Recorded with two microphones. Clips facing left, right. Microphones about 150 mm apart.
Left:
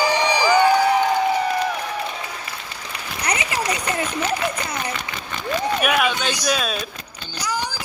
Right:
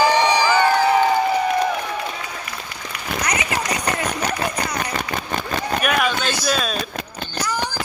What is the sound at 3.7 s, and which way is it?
Run, 40° right (ahead or behind).